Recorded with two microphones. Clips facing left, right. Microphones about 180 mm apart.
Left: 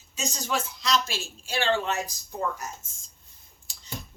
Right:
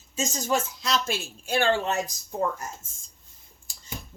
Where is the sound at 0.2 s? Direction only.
45° right (ahead or behind).